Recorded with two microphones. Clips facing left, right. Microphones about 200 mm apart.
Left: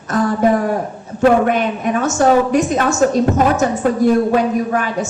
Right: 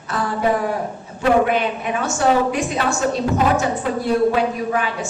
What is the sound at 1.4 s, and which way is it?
A woman's voice, 45° left (ahead or behind).